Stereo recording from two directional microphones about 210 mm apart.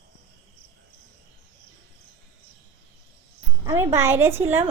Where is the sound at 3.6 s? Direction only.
10° right (ahead or behind).